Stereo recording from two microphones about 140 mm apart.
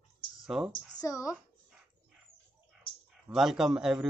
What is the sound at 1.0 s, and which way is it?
Speech, 25° left (ahead or behind).